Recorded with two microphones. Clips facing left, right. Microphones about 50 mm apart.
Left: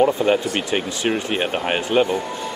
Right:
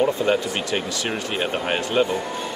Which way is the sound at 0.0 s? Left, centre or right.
Centre.